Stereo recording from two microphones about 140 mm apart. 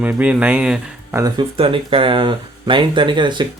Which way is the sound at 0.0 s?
10° right (ahead or behind).